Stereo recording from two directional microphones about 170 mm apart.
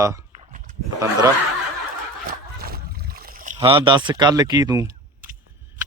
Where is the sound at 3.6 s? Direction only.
30° right (ahead or behind).